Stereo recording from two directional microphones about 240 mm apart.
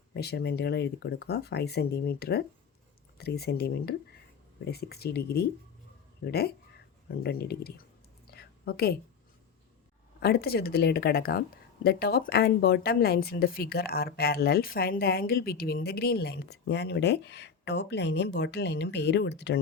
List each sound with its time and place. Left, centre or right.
0.2 s speech: left
8.3 s whispering: left
10.2 s speech: left